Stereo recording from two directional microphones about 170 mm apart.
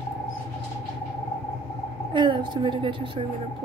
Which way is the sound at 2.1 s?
30° right (ahead or behind).